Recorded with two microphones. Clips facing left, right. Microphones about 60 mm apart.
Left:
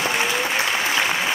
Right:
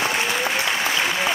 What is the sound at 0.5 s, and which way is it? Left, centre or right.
Applause, centre.